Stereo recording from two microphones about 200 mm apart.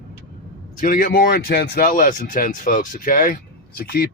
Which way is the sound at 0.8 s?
40° left (ahead or behind).